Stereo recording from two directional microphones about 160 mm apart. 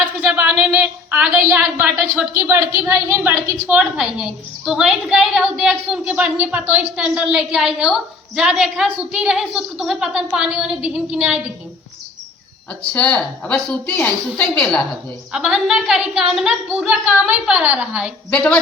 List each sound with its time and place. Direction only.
0.2 s a woman's voice: centre (ahead or behind)
12.8 s a woman's voice: 5° left (ahead or behind)
18.3 s a woman's voice: 5° left (ahead or behind)